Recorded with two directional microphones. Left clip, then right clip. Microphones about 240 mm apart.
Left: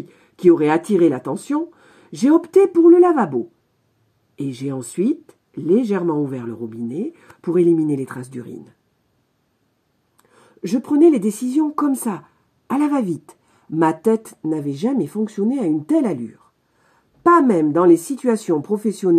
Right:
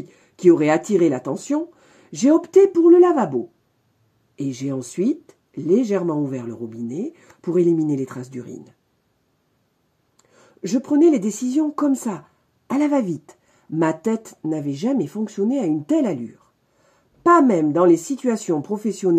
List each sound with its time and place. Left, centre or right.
0.1 s speech: left
4.4 s speech: left
10.1 s speech: left
17.2 s speech: left